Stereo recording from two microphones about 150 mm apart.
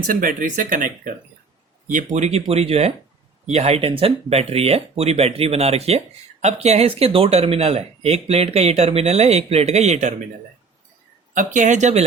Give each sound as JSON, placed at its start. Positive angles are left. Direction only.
{"t": 0.1, "sound": "speech", "side_deg": -65}
{"t": 11.3, "sound": "speech", "side_deg": -55}